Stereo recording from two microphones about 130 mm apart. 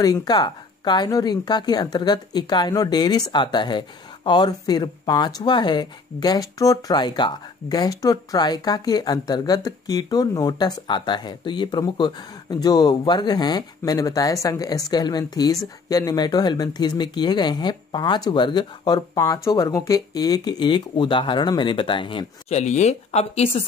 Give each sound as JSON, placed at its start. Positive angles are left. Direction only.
{"t": 0.0, "sound": "a woman's voice", "side_deg": 30}
{"t": 22.5, "sound": "speech", "side_deg": 60}